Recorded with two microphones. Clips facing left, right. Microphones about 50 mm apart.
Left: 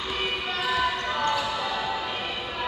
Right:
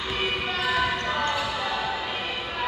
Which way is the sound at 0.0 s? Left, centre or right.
Centre.